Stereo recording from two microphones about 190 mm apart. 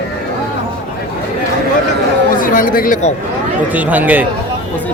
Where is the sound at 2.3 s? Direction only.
45° left (ahead or behind).